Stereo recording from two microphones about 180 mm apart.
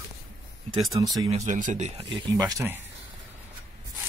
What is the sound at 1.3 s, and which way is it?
Speech, 40° right (ahead or behind).